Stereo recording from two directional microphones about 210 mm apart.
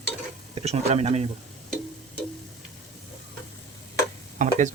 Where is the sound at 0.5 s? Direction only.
30° right (ahead or behind).